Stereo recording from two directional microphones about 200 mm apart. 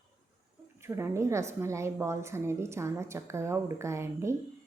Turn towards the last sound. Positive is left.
turn(degrees=-15)  # may be behind; listen again after turning